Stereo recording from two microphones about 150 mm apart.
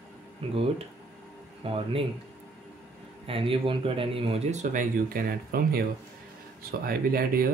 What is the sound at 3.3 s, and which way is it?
Speech, 35° right (ahead or behind).